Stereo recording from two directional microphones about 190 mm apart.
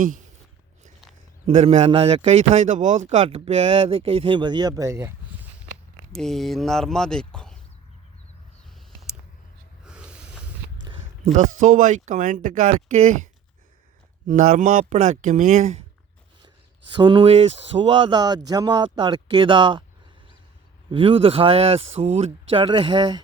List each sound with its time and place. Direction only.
1.5 s a man's voice: 35° right (ahead or behind); by 5.1 s 15° right (ahead or behind)
6.1 s speech: centre (ahead or behind)
9.8 s snort: 5° right (ahead or behind)
10.9 s a sound: 25° right (ahead or behind)
11.3 s a man's voice: 40° right (ahead or behind)
14.3 s a man's voice: 45° right (ahead or behind)
16.9 s speech: 25° right (ahead or behind)
20.9 s speech: 30° right (ahead or behind)